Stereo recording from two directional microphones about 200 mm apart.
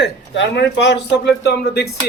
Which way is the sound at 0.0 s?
60° left (ahead or behind).